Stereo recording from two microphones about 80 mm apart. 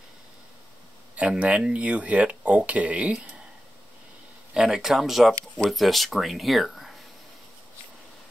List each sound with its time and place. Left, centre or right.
1.1 s speech: centre
4.6 s speech: centre